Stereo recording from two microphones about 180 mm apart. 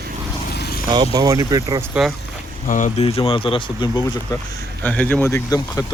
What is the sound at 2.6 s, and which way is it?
Speech, 45° left (ahead or behind).